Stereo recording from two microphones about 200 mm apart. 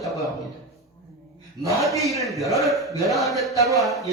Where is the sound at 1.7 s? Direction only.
Centre (ahead or behind).